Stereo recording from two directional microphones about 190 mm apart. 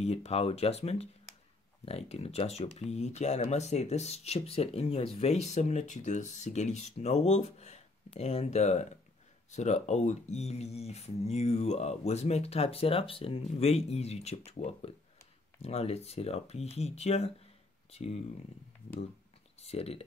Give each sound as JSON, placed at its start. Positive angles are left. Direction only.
{"t": 0.0, "sound": "speech", "side_deg": 35}
{"t": 19.6, "sound": "speech", "side_deg": 35}